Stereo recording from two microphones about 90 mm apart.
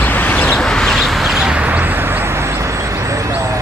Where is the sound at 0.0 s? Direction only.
20° left (ahead or behind).